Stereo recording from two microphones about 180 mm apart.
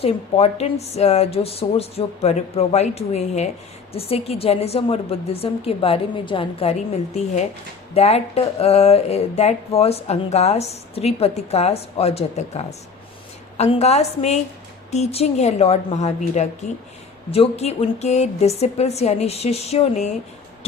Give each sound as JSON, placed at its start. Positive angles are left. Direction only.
{"t": 0.0, "sound": "speech", "side_deg": 35}
{"t": 7.9, "sound": "speech", "side_deg": 35}